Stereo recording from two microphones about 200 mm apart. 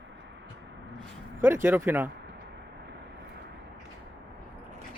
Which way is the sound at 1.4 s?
10° right (ahead or behind).